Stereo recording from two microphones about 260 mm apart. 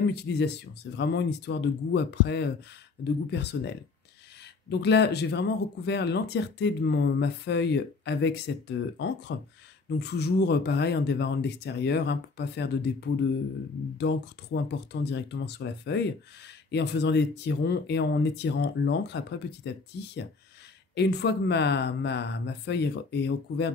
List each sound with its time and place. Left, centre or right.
0.1 s speech: left
4.6 s speech: left